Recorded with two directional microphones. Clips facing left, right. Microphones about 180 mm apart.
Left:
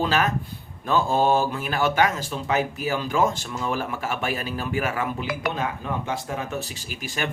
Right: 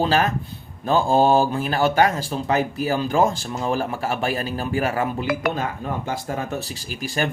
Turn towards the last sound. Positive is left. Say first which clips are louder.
# right 5 dB
turn(degrees=-35)  # may be behind; listen again after turning